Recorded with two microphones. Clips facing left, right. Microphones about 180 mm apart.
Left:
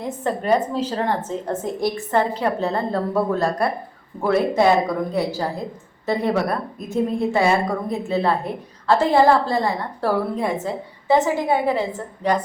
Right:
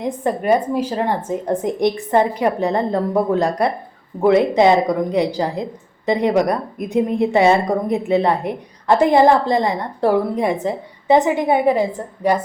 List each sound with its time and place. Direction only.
0.0 s a woman's voice: 15° right (ahead or behind)